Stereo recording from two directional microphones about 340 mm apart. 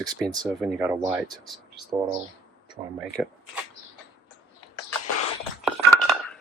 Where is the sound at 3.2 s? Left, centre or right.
Centre.